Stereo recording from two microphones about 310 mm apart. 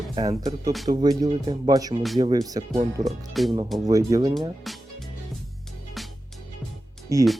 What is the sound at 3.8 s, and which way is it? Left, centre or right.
Speech, centre.